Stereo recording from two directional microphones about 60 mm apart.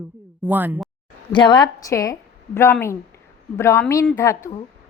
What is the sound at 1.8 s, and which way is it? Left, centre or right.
Speech, left.